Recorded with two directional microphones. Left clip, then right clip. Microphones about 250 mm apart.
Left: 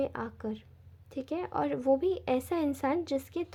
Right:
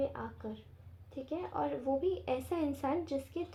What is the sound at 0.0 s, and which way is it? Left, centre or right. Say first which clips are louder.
Speech: left 3 dB; left.